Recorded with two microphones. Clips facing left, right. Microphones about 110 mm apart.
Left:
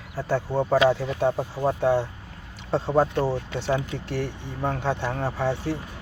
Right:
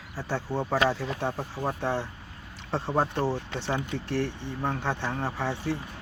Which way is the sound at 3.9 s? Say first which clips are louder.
Even; 50° left (ahead or behind).